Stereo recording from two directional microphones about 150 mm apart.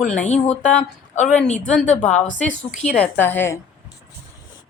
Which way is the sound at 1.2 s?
5° left (ahead or behind).